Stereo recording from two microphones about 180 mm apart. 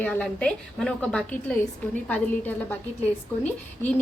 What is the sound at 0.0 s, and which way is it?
A woman's voice, 10° left (ahead or behind).